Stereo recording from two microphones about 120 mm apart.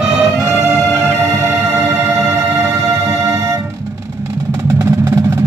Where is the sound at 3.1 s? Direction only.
30° right (ahead or behind).